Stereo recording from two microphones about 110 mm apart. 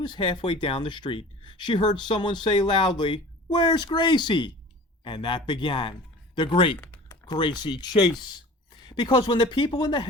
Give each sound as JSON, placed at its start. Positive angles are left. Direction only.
{"t": 0.0, "sound": "speech", "side_deg": 45}
{"t": 7.3, "sound": "speech", "side_deg": 45}